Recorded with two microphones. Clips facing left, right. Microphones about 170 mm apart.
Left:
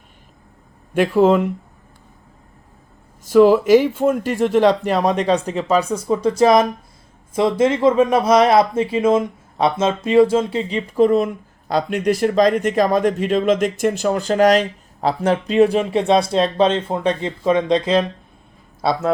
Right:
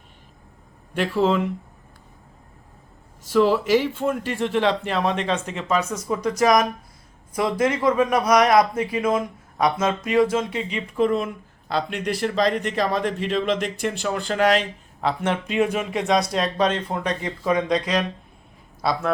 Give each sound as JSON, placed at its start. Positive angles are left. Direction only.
{"t": 0.9, "sound": "speech", "side_deg": 50}
{"t": 3.2, "sound": "a man's voice", "side_deg": 50}